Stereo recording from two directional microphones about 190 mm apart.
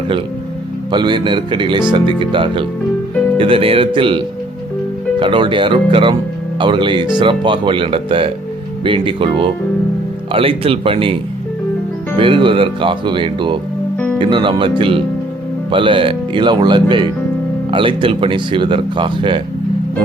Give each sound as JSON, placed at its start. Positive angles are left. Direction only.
{"t": 0.9, "sound": "speech", "side_deg": -25}
{"t": 5.2, "sound": "speech", "side_deg": -25}
{"t": 12.2, "sound": "speech", "side_deg": -25}